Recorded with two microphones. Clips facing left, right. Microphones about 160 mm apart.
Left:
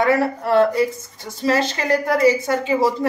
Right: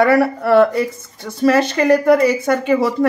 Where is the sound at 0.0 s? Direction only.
70° right (ahead or behind).